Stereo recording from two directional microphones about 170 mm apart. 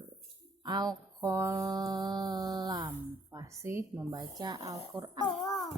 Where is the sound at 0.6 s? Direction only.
25° right (ahead or behind).